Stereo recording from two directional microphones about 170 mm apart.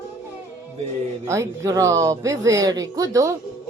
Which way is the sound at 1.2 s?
15° right (ahead or behind).